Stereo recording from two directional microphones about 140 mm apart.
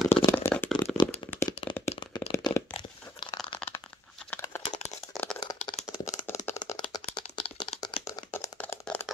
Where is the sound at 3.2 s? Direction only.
35° left (ahead or behind).